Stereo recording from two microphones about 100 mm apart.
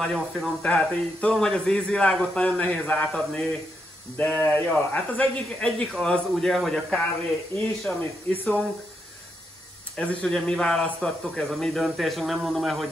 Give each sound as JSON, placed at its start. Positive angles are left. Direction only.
{"t": 0.0, "sound": "speech", "side_deg": 5}
{"t": 9.9, "sound": "speech", "side_deg": 10}